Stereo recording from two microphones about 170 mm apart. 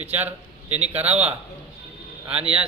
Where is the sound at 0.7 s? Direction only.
40° right (ahead or behind).